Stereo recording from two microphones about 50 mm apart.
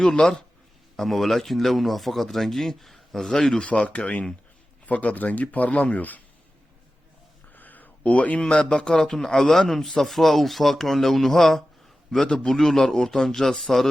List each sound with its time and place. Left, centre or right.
0.0 s a man's voice: centre
0.9 s speech: centre
3.5 s speech: left
7.5 s a sound: left
8.4 s a man's voice: centre